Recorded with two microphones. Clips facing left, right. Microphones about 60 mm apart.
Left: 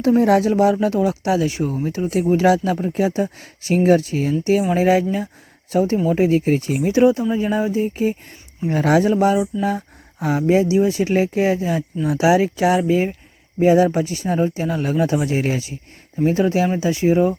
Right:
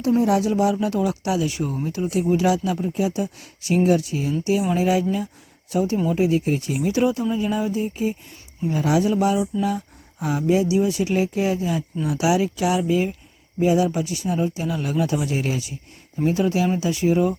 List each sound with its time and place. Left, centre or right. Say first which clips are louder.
0.2 s speech: left 4 dB; left
8.6 s speech: left 4 dB; left